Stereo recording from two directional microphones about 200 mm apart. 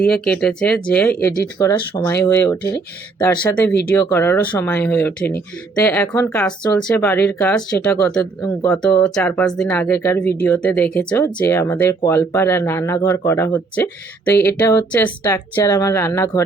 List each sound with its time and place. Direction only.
0.0 s speech: 5° left (ahead or behind)
1.3 s speech: 20° left (ahead or behind)